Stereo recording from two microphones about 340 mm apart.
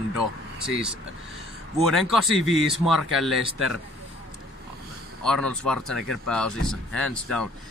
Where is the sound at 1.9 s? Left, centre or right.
Centre.